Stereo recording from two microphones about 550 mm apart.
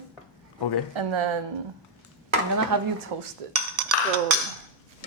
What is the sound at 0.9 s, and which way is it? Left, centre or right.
Speech, right.